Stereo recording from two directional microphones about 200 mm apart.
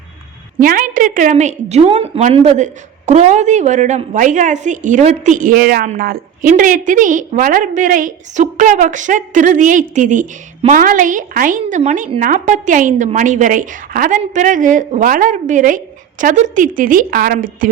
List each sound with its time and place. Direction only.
0.6 s a woman's voice: 45° right (ahead or behind)